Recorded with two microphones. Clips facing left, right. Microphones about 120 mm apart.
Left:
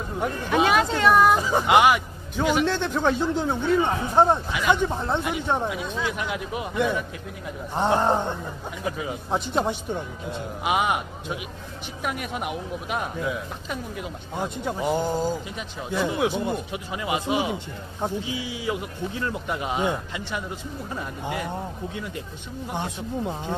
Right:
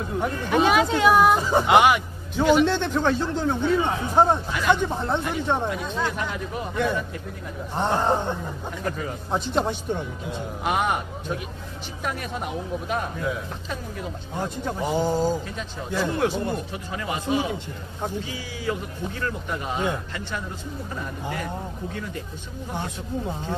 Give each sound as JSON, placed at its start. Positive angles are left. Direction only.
{"t": 0.5, "sound": "speech", "side_deg": 0}
{"t": 16.1, "sound": "speech", "side_deg": 5}
{"t": 22.7, "sound": "speech", "side_deg": 15}